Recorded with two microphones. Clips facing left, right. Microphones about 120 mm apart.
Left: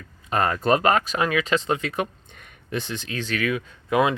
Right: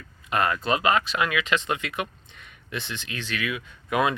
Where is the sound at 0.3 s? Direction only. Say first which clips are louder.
Left 3 dB; 35° left (ahead or behind).